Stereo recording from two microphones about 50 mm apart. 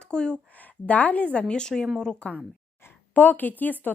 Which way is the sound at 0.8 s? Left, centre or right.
Left.